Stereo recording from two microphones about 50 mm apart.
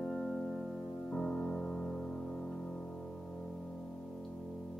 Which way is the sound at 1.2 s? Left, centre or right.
Centre.